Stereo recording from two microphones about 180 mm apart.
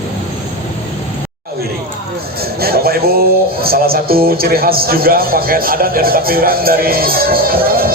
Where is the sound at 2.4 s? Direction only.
60° right (ahead or behind).